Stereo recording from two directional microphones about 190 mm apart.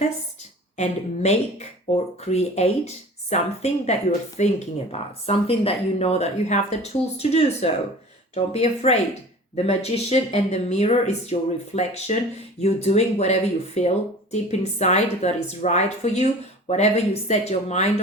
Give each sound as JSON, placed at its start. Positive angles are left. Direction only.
{"t": 0.8, "sound": "speech", "side_deg": 35}